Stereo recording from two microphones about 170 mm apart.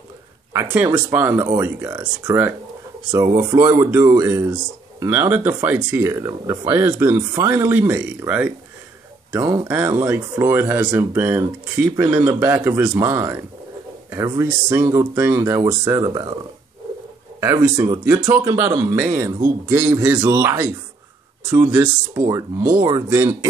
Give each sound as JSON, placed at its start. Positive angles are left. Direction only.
{"t": 0.5, "sound": "speech", "side_deg": -15}
{"t": 9.7, "sound": "speech", "side_deg": -10}
{"t": 17.4, "sound": "speech", "side_deg": -15}
{"t": 20.2, "sound": "speech", "side_deg": -25}